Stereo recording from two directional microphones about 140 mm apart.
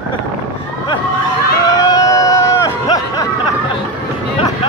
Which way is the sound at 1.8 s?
25° left (ahead or behind).